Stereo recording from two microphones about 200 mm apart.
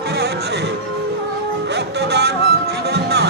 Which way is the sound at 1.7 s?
55° right (ahead or behind).